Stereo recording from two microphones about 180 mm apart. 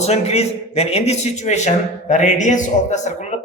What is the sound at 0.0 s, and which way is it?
A man's voice, 35° left (ahead or behind).